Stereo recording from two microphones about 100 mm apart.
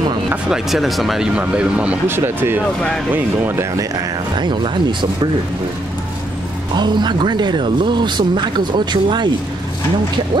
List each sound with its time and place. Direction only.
0.5 s speech: 5° right (ahead or behind)
2.0 s speech: 25° right (ahead or behind)
3.7 s speech: 45° right (ahead or behind)
6.7 s speech: 45° right (ahead or behind)